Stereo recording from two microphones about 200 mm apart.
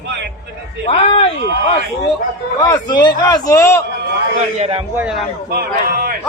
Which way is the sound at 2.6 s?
20° left (ahead or behind).